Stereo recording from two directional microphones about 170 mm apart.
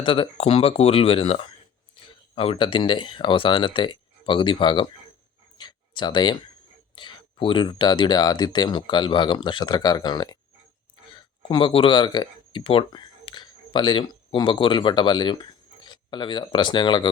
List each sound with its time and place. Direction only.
0.0 s speech: 30° left (ahead or behind)
5.5 s a sound: 25° left (ahead or behind)
6.9 s speech: 30° left (ahead or behind)